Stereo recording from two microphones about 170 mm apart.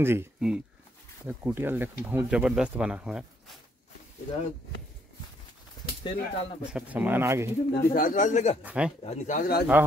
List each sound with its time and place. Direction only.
0.0 s speech: 15° right (ahead or behind)
5.8 s speech: 30° left (ahead or behind)
6.6 s speech: 5° right (ahead or behind)
7.7 s speech: 60° left (ahead or behind)
8.6 s speech: 5° right (ahead or behind)
9.0 s speech: 45° left (ahead or behind); by 9.7 s 60° left (ahead or behind)